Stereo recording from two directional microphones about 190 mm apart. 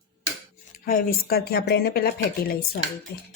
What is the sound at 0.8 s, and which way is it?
A woman's voice, 50° left (ahead or behind).